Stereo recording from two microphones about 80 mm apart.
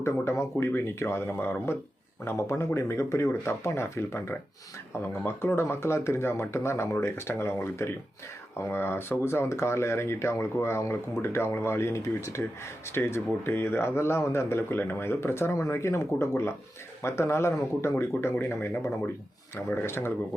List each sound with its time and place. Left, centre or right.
0.0 s speech: left